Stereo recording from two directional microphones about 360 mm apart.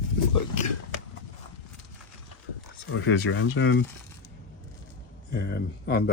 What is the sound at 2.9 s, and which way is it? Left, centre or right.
Speech, left.